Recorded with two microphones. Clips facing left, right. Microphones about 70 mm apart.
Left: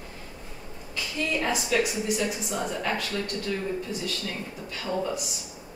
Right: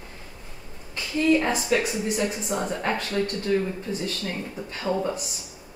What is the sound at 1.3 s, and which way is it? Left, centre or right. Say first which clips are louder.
A woman's voice: right 3 dB; right.